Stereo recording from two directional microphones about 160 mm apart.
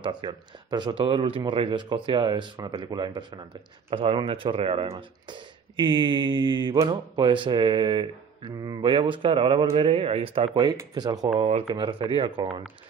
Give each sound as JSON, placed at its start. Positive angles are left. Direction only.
{"t": 0.0, "sound": "speech", "side_deg": -30}
{"t": 11.3, "sound": "speech", "side_deg": -40}